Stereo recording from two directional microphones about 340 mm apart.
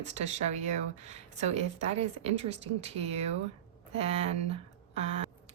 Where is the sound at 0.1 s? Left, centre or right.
Centre.